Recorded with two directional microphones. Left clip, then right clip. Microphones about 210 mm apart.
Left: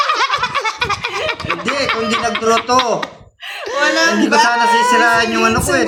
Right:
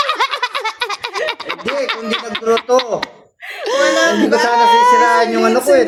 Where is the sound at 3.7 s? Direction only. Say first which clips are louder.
Right 2 dB; 35° right (ahead or behind).